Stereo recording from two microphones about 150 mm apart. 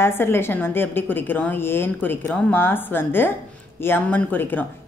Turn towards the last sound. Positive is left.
turn(degrees=10)  # may be behind; listen again after turning